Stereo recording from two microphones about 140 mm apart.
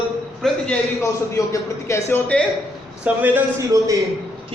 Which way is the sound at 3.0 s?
10° right (ahead or behind).